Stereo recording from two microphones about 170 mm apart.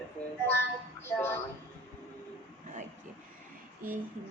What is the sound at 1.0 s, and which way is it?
Speech, 15° left (ahead or behind).